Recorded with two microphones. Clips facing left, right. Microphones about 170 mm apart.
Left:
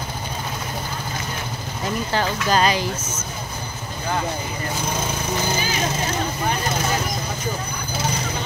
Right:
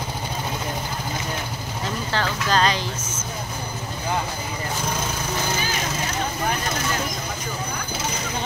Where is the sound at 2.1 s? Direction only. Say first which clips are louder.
Left 2 dB; 10° left (ahead or behind).